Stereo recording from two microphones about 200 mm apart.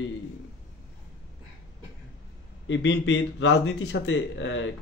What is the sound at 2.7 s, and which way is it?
Speech, 60° left (ahead or behind).